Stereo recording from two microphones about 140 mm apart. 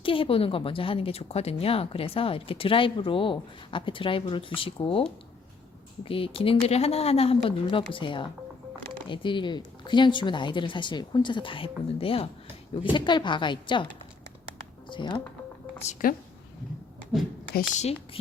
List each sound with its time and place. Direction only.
0.0 s speech: 40° left (ahead or behind)
6.1 s speech: 40° left (ahead or behind)
14.8 s speech: 35° left (ahead or behind)
16.0 s speech: 75° left (ahead or behind)